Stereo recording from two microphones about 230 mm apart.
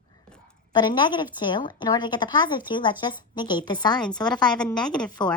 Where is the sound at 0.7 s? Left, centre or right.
Centre.